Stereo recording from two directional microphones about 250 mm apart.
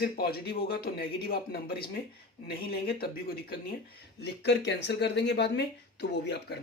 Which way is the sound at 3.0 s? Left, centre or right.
Left.